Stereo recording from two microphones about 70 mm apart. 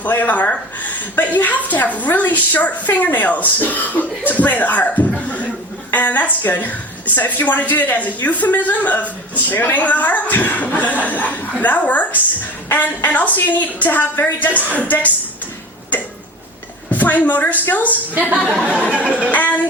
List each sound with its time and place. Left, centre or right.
0.0 s a woman's voice: left
16.9 s a woman's voice: left
17.9 s a woman's voice: right
19.3 s a woman's voice: left